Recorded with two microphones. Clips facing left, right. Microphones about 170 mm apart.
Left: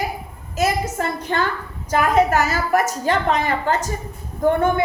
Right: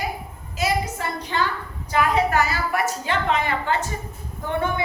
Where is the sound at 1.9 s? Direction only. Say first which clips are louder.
Left 4 dB; 45° left (ahead or behind).